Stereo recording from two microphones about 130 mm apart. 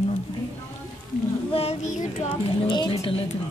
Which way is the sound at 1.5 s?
50° left (ahead or behind).